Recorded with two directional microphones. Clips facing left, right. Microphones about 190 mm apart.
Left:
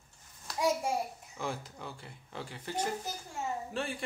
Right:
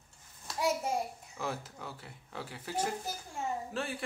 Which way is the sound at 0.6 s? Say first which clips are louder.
Left 1 dB; 10° left (ahead or behind).